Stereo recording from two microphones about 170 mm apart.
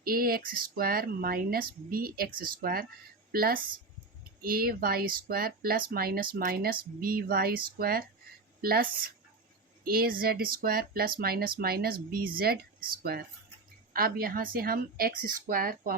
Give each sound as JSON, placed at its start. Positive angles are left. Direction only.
{"t": 0.0, "sound": "speech", "side_deg": -60}